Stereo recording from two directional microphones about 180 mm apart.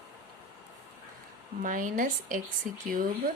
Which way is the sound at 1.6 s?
45° right (ahead or behind).